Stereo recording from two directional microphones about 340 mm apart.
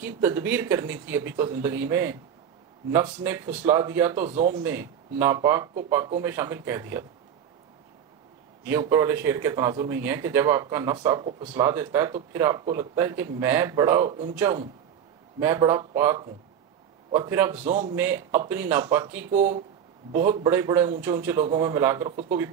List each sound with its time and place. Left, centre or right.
0.0 s speech: centre
8.6 s speech: centre
17.6 s a man's voice: right
17.9 s speech: centre